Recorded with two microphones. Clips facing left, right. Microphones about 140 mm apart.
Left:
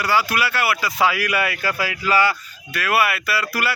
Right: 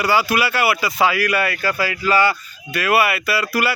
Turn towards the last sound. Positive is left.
turn(degrees=0)  # may be behind; listen again after turning